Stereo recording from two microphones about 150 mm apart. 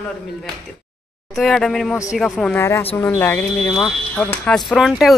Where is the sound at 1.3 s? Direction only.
5° left (ahead or behind).